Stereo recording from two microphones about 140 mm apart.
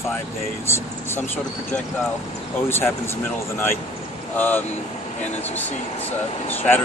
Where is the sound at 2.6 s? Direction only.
15° left (ahead or behind).